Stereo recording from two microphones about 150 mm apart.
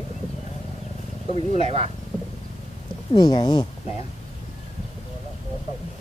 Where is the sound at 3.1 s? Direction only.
30° left (ahead or behind).